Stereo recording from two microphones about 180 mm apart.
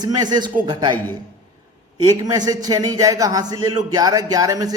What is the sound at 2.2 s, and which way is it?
Speech, 20° right (ahead or behind).